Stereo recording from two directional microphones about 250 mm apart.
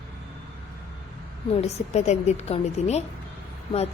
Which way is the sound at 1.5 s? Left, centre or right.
Left.